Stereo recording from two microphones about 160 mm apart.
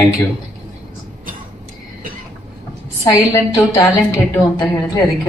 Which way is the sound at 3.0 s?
20° left (ahead or behind).